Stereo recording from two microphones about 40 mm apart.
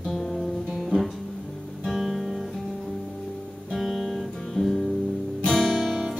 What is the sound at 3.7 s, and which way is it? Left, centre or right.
Guitar, centre.